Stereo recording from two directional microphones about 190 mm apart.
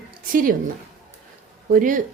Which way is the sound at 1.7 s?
45° right (ahead or behind).